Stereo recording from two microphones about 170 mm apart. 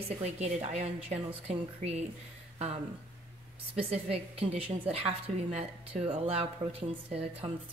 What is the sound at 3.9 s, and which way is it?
A woman's voice, 35° right (ahead or behind).